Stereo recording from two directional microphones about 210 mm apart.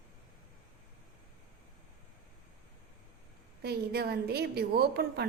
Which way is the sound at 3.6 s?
50° right (ahead or behind).